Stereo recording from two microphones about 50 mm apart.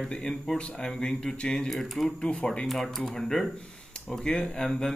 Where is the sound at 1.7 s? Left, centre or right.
Centre.